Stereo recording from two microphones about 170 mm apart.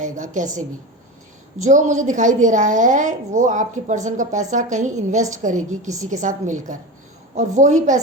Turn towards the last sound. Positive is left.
turn(degrees=-45)  # may be behind; listen again after turning